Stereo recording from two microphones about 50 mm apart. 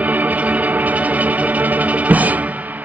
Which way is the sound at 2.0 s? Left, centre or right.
Right.